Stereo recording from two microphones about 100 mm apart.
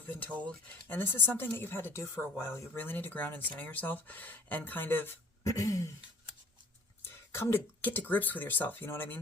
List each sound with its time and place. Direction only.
0.2 s speech: 15° left (ahead or behind)
5.4 s throat clearing: 35° left (ahead or behind)
7.0 s speech: 25° left (ahead or behind)